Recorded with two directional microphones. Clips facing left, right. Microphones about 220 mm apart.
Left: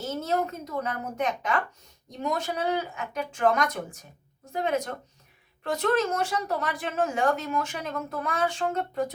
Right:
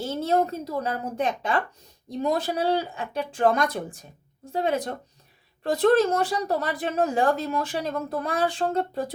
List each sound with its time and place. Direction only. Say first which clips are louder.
0.0 s a woman's voice: right 4 dB; 30° right (ahead or behind)